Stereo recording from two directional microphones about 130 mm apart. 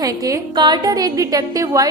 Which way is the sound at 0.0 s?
30° right (ahead or behind).